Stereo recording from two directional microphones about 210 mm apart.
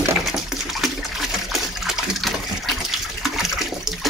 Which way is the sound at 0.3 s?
Centre (ahead or behind).